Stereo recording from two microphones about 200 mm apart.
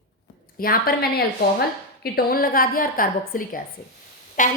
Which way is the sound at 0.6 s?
50° left (ahead or behind).